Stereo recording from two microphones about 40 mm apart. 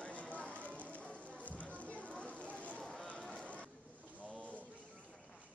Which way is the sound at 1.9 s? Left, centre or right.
Left.